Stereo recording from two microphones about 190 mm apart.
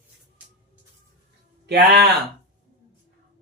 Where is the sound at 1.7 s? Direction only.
60° right (ahead or behind).